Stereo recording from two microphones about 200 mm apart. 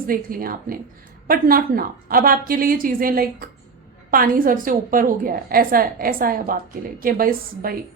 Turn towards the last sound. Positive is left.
turn(degrees=-45)  # may be behind; listen again after turning